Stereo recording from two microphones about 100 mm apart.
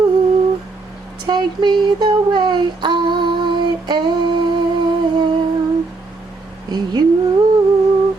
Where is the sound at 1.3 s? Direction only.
50° right (ahead or behind).